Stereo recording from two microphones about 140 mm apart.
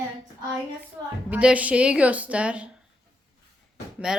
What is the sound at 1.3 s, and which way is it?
A woman's voice, 10° right (ahead or behind).